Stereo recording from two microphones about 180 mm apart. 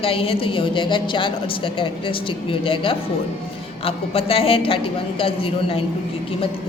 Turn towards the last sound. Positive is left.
turn(degrees=30)  # may be behind; listen again after turning